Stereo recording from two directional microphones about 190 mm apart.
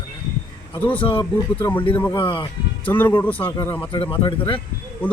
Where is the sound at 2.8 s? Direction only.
10° left (ahead or behind).